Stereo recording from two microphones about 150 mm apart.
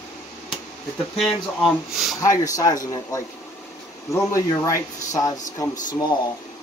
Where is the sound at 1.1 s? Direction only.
Centre (ahead or behind).